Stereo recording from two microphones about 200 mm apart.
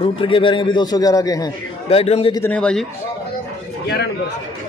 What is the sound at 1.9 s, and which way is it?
Speech, 30° left (ahead or behind).